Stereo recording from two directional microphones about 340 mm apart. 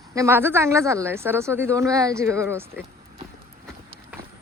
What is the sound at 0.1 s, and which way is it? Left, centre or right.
Speech, centre.